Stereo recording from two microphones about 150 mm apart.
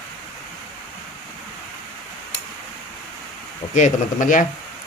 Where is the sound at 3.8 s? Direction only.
55° left (ahead or behind).